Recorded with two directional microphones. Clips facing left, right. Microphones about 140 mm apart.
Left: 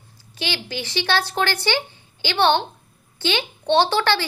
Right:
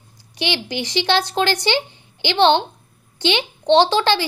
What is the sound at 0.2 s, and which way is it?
Speech, 20° right (ahead or behind).